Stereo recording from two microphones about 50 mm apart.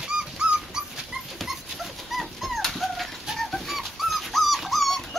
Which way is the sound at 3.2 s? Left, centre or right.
Centre.